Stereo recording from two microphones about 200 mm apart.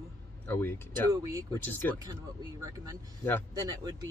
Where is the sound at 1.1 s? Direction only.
15° right (ahead or behind).